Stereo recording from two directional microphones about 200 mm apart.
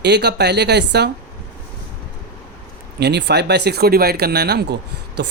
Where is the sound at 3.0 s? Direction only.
55° right (ahead or behind).